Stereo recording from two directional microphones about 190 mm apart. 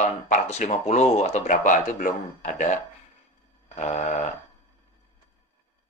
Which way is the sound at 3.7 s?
35° left (ahead or behind).